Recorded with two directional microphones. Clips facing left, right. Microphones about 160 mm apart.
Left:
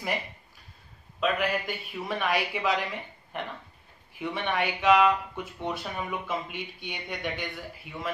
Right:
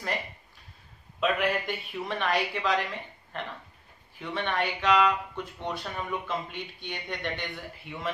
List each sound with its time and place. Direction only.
1.2 s a woman's voice: centre (ahead or behind)